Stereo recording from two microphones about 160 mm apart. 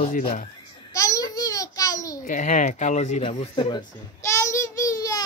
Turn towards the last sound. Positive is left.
turn(degrees=20)  # may be behind; listen again after turning